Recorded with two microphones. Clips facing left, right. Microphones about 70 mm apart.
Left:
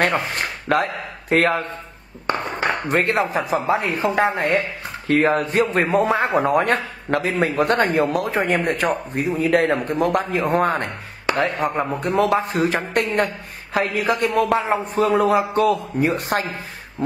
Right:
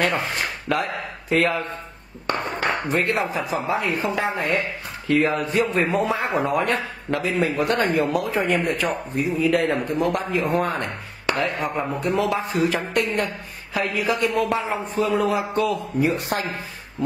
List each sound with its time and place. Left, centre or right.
0.0 s speech: left
2.9 s a man's voice: left